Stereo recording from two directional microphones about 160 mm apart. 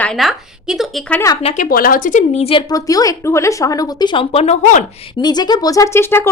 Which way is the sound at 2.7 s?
20° left (ahead or behind).